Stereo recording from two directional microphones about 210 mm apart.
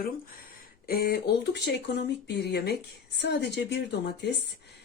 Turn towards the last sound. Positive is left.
turn(degrees=55)  # may be behind; listen again after turning